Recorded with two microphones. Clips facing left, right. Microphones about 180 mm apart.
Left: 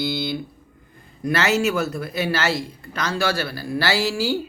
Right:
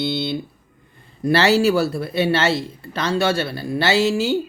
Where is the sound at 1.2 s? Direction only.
30° right (ahead or behind).